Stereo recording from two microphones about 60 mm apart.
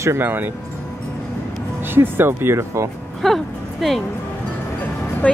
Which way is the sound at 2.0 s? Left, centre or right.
Right.